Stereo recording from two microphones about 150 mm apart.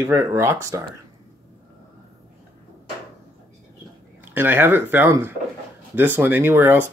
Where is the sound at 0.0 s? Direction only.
20° right (ahead or behind).